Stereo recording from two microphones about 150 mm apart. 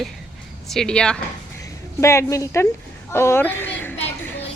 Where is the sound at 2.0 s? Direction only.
20° left (ahead or behind).